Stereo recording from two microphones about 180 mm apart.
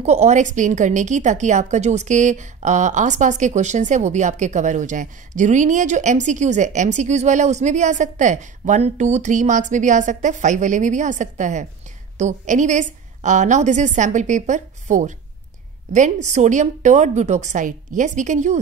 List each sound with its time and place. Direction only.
0.0 s a woman's voice: 40° right (ahead or behind)